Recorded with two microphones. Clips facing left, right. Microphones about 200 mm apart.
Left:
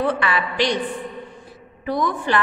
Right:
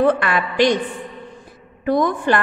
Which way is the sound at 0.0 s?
50° right (ahead or behind).